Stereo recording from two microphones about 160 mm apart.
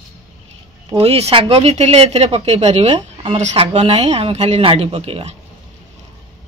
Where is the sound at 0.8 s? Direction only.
35° right (ahead or behind).